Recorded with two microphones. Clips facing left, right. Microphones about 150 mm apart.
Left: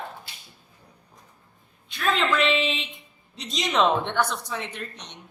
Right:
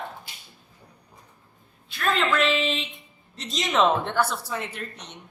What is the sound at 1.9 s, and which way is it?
A woman's voice, centre (ahead or behind).